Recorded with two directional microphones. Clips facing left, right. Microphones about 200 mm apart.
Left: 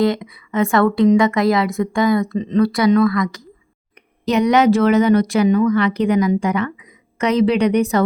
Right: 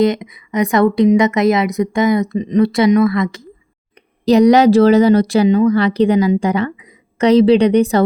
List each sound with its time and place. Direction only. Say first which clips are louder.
0.0 s a woman's voice: right 3 dB; 20° right (ahead or behind)
4.3 s a woman's voice: right 5 dB; 35° right (ahead or behind)